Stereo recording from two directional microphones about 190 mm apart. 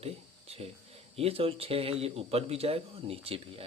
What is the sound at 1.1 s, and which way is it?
Speech, 30° right (ahead or behind).